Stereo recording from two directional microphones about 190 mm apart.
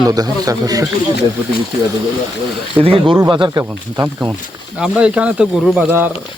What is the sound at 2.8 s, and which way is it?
Speech, 30° right (ahead or behind).